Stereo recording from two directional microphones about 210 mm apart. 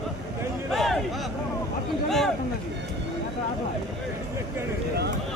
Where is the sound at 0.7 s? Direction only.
Centre (ahead or behind).